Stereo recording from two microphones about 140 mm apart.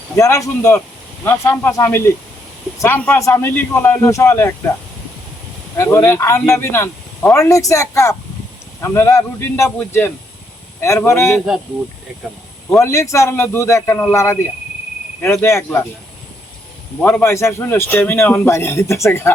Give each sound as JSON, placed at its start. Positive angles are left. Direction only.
{"t": 0.2, "sound": "a man's voice", "side_deg": 20}
{"t": 5.7, "sound": "a man's voice", "side_deg": 20}
{"t": 12.8, "sound": "a man's voice", "side_deg": 20}
{"t": 17.0, "sound": "a man's voice", "side_deg": 10}